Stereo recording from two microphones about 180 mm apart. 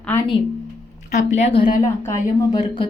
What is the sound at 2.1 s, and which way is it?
Speech, 15° left (ahead or behind).